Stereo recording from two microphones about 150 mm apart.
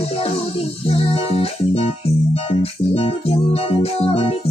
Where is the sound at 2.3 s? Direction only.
40° left (ahead or behind).